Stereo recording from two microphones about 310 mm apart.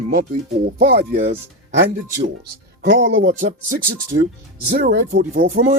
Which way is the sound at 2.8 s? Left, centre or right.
Right.